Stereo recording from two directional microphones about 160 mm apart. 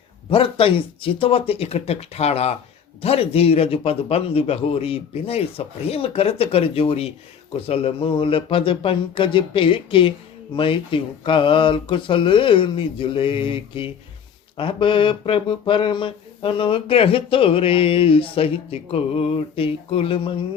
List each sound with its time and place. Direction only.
0.3 s speech: 35° left (ahead or behind)